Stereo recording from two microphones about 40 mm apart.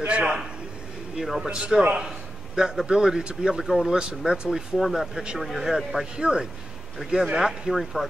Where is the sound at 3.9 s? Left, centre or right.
Right.